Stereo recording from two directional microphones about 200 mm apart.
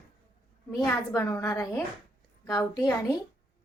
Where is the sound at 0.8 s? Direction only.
15° left (ahead or behind).